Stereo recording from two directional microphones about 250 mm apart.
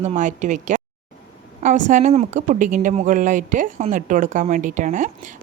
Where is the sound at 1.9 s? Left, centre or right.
Right.